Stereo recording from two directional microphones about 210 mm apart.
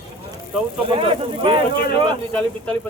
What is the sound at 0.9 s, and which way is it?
Speech, 25° right (ahead or behind).